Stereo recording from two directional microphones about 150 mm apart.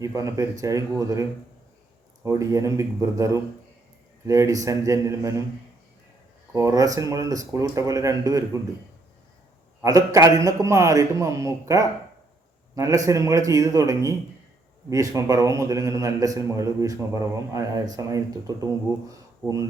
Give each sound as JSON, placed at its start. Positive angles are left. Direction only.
{"t": 0.0, "sound": "a man's voice", "side_deg": -20}
{"t": 6.5, "sound": "a man's voice", "side_deg": -20}
{"t": 9.8, "sound": "a man's voice", "side_deg": -20}